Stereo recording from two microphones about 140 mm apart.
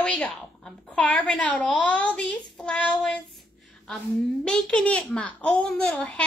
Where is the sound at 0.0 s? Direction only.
5° left (ahead or behind).